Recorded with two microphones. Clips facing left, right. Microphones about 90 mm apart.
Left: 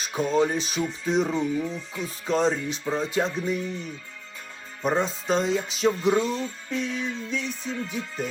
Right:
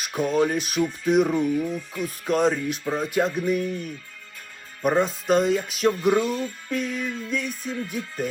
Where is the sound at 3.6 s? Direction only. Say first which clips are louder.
Right 4 dB; 55° right (ahead or behind).